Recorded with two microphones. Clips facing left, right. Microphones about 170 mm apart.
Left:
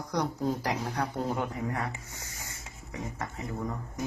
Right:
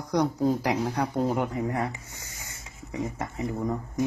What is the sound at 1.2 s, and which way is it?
Speech, 15° right (ahead or behind).